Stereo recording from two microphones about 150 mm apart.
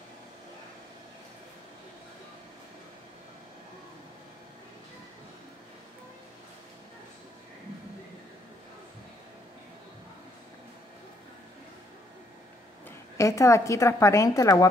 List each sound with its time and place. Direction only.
13.2 s a woman's voice: 20° left (ahead or behind)